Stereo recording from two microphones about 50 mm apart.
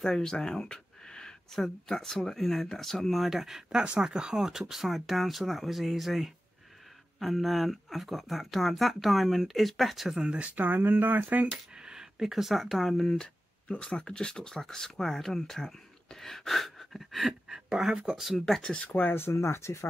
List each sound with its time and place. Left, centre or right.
0.0 s speech: centre
3.8 s speech: centre
10.2 s speech: right
10.5 s speech: right
11.5 s speech: centre
13.7 s speech: left; by 18.3 s centre
18.4 s speech: centre
18.8 s speech: left
19.3 s speech: left